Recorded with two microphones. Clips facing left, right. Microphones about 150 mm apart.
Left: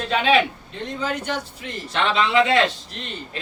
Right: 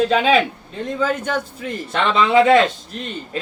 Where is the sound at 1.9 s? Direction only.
50° right (ahead or behind).